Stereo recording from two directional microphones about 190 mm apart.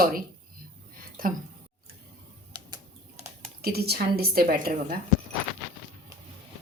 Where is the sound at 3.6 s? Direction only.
55° right (ahead or behind).